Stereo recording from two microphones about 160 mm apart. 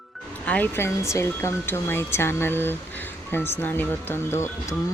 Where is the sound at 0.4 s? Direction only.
10° left (ahead or behind).